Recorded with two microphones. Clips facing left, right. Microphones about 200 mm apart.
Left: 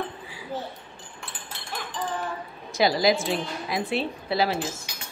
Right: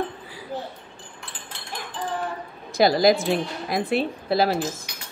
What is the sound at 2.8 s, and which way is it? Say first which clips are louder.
Speech: right 4 dB; 45° right (ahead or behind).